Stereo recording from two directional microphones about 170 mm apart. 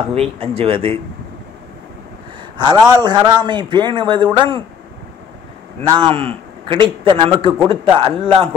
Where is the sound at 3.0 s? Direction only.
25° right (ahead or behind).